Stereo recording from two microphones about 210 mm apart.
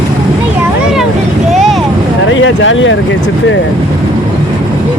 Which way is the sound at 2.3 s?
65° left (ahead or behind).